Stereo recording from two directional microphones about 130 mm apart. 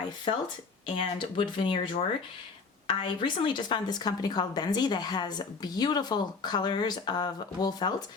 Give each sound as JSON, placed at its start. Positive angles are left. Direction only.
{"t": 0.9, "sound": "a woman's voice", "side_deg": 40}